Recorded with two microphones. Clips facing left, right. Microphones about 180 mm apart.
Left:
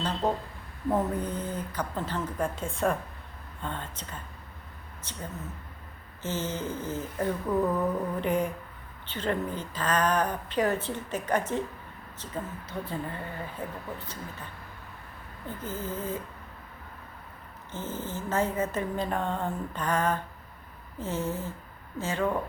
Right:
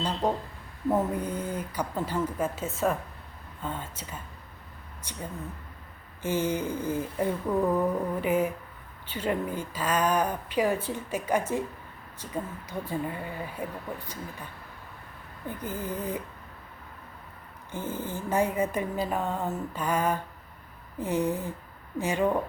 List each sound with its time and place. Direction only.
0.2 s a woman's voice: 10° right (ahead or behind)
6.2 s a woman's voice: 15° right (ahead or behind)
15.4 s a woman's voice: 15° right (ahead or behind)
17.7 s a woman's voice: 15° right (ahead or behind)